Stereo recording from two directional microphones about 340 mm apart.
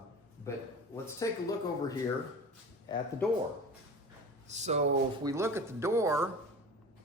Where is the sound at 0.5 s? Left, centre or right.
Centre.